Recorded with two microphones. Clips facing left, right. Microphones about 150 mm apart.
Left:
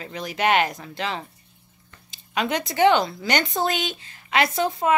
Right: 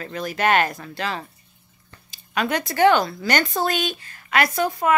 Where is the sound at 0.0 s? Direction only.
15° left (ahead or behind).